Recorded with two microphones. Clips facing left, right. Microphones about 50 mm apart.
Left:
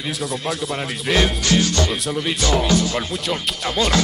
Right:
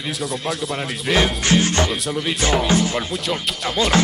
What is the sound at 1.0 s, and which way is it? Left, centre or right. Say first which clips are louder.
Speech: even; centre.